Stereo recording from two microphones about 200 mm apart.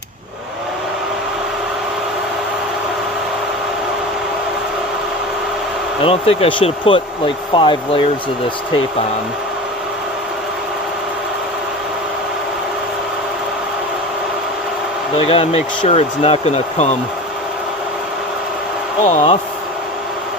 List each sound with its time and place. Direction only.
6.0 s speech: 30° left (ahead or behind)
15.3 s speech: 30° left (ahead or behind)
19.0 s speech: 30° left (ahead or behind)